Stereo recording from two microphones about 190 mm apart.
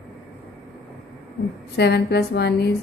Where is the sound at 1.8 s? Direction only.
60° left (ahead or behind).